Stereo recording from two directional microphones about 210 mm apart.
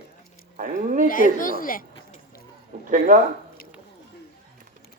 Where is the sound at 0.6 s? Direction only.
40° right (ahead or behind).